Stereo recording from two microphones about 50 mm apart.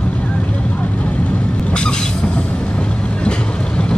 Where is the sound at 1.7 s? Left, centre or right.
Centre.